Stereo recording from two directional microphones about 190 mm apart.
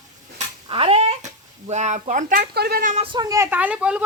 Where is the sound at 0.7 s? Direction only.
30° right (ahead or behind).